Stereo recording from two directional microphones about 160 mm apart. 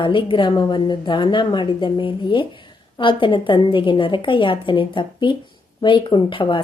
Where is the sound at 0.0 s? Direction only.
30° left (ahead or behind).